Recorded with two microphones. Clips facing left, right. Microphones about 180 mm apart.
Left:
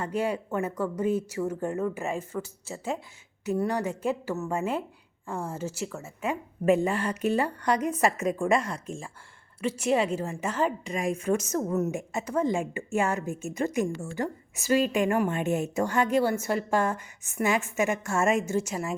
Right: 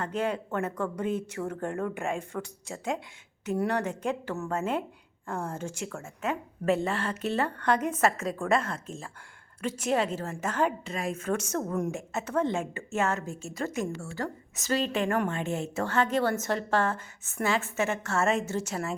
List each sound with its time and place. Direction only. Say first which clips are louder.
0.0 s a woman's voice: left 1 dB; 10° left (ahead or behind)